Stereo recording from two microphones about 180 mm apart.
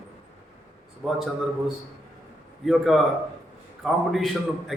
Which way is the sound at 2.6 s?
Centre (ahead or behind).